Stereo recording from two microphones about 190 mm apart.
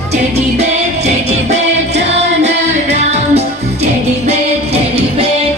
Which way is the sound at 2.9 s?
35° right (ahead or behind).